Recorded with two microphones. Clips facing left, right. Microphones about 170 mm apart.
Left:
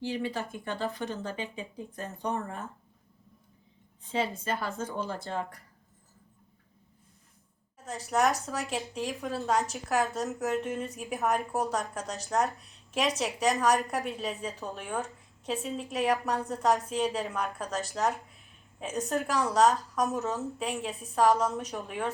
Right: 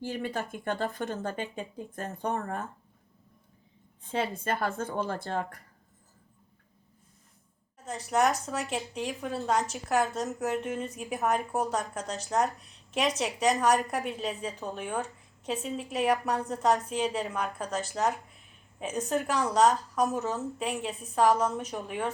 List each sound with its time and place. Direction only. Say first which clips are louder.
0.0 s a woman's voice: left 1 dB; 50° right (ahead or behind)
4.0 s a woman's voice: even; 55° right (ahead or behind)
7.9 s a woman's voice: right 1 dB; centre (ahead or behind)